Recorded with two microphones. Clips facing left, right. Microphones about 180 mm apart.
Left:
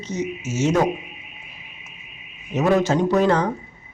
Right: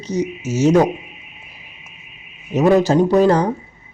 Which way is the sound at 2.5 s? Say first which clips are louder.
Right 5 dB; 35° right (ahead or behind).